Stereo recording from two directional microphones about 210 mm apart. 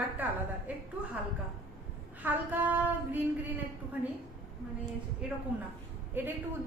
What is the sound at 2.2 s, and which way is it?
A woman's voice, 10° right (ahead or behind).